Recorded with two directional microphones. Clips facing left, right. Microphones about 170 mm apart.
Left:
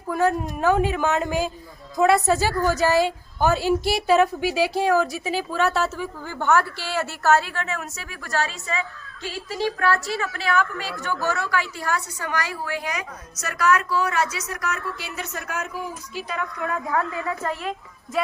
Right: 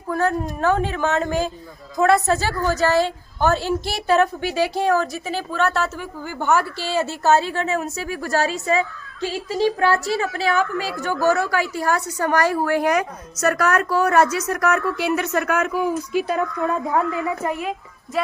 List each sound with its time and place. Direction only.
0.1 s a woman's voice: 10° left (ahead or behind)
6.4 s a woman's voice: 15° right (ahead or behind); by 16.5 s 50° right (ahead or behind)
16.6 s a woman's voice: 30° right (ahead or behind)
17.6 s a woman's voice: 5° right (ahead or behind)